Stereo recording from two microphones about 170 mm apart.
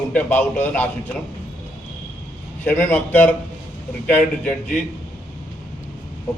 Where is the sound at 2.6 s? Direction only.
10° left (ahead or behind).